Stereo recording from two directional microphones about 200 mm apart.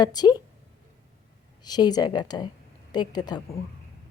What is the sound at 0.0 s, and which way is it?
Speech, 20° left (ahead or behind).